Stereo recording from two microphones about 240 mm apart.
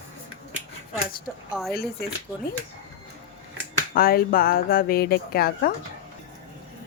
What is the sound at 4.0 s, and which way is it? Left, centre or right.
Speech, left.